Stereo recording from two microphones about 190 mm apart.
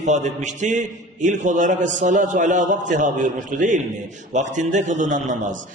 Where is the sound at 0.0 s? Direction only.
40° right (ahead or behind).